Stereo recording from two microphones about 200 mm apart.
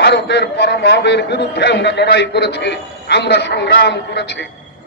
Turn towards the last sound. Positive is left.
turn(degrees=55)  # may be behind; listen again after turning